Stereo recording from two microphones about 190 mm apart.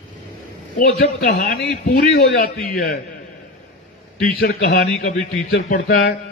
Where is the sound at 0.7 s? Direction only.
45° left (ahead or behind).